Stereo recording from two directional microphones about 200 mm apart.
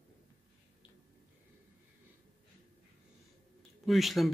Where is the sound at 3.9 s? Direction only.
Centre (ahead or behind).